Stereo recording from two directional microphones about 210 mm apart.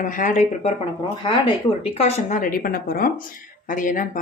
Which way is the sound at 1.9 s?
35° left (ahead or behind).